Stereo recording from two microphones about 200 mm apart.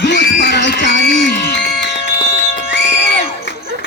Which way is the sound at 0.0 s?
60° left (ahead or behind).